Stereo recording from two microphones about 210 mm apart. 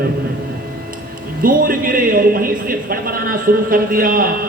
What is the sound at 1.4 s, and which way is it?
Speech, 40° right (ahead or behind).